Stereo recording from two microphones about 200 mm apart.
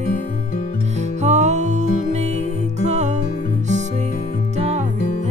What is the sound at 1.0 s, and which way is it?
Music, 35° right (ahead or behind).